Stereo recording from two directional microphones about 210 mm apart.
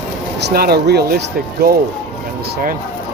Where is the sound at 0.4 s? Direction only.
50° right (ahead or behind).